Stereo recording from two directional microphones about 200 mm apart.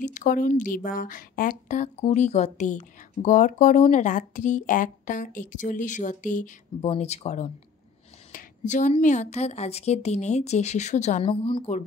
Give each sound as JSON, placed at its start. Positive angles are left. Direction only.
{"t": 0.0, "sound": "speech", "side_deg": 40}
{"t": 8.3, "sound": "a sound", "side_deg": 40}
{"t": 9.0, "sound": "speech", "side_deg": 35}